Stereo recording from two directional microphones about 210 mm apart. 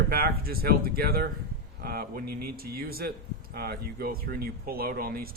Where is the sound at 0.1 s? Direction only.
45° right (ahead or behind).